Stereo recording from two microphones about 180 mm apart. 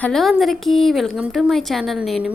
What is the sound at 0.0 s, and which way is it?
A woman's voice, centre (ahead or behind).